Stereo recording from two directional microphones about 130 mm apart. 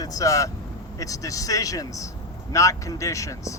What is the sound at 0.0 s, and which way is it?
Speech, 25° left (ahead or behind).